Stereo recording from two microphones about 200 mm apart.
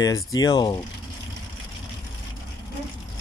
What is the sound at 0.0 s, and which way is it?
Speech, 20° left (ahead or behind).